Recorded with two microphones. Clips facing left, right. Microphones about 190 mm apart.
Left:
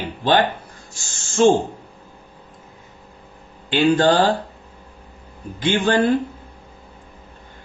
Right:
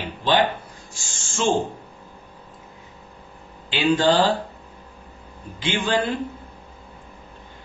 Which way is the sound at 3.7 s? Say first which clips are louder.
Left 3 dB; 50° left (ahead or behind).